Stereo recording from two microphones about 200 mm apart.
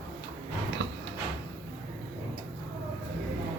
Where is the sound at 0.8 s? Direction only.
65° right (ahead or behind).